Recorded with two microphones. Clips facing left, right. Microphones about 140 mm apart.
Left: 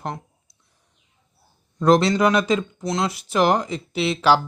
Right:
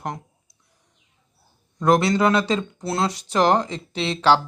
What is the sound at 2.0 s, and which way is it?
Speech, 25° right (ahead or behind).